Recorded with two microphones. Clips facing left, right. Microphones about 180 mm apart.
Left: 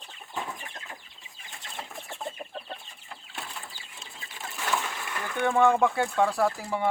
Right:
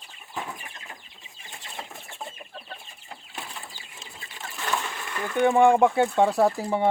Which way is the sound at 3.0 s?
20° right (ahead or behind).